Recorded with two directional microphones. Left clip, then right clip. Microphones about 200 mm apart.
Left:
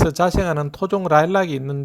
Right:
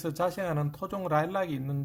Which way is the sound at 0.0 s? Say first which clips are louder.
Left 12 dB; 35° left (ahead or behind).